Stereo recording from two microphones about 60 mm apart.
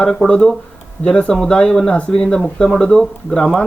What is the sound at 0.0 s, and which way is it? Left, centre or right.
Speech, centre.